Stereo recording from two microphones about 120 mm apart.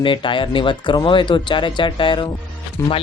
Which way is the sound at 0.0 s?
45° left (ahead or behind).